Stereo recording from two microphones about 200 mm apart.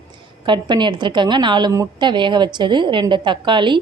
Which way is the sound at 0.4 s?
25° right (ahead or behind).